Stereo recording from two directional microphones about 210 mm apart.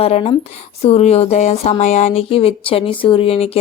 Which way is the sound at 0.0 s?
30° left (ahead or behind).